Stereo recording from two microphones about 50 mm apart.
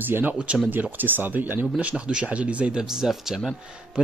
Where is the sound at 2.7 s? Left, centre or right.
Centre.